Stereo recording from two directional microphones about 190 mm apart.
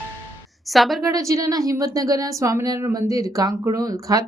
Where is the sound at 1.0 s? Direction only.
15° right (ahead or behind).